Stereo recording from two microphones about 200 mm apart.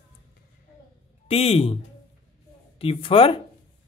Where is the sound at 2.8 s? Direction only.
30° left (ahead or behind).